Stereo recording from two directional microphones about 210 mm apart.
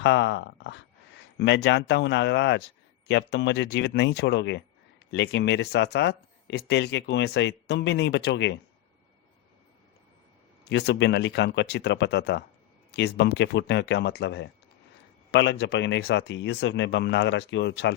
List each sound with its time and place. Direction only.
0.0 s speech: 60° left (ahead or behind)
10.7 s speech: 55° left (ahead or behind)